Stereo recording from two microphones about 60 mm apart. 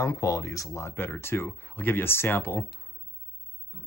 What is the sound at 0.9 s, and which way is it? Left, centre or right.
Speech, left.